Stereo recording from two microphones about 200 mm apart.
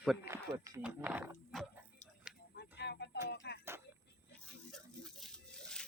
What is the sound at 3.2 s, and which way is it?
Music, 55° left (ahead or behind).